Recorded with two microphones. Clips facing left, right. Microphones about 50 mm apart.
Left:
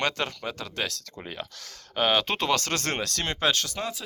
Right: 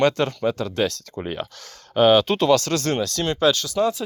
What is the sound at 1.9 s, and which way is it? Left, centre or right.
Speech, centre.